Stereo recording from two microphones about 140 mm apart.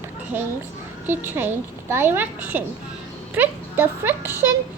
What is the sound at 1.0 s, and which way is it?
A woman's voice, 15° right (ahead or behind).